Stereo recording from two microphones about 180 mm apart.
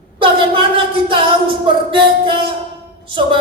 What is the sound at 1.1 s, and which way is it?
Music, 30° right (ahead or behind).